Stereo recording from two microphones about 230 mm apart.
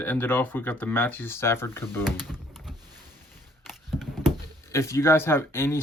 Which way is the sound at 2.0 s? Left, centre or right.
Centre.